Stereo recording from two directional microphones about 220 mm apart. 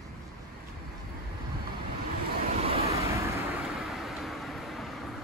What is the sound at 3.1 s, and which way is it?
Vehicle, 15° right (ahead or behind).